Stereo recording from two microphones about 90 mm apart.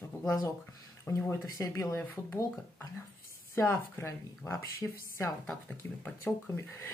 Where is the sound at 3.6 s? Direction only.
30° left (ahead or behind).